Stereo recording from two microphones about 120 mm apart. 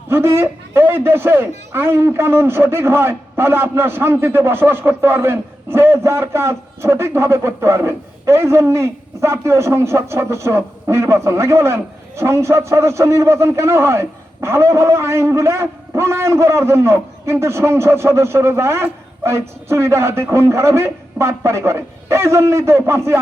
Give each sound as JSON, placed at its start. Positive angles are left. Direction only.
{"t": 0.1, "sound": "a man's voice", "side_deg": -20}